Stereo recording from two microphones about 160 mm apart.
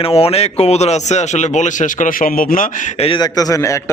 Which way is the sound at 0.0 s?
40° left (ahead or behind).